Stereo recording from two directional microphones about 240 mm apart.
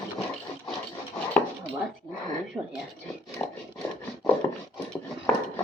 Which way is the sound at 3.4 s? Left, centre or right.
Centre.